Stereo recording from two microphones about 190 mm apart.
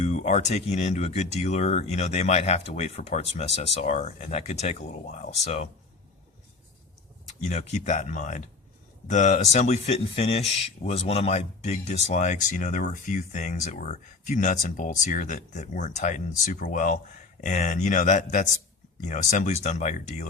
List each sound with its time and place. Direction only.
0.0 s speech: 35° left (ahead or behind)
7.4 s speech: 40° left (ahead or behind)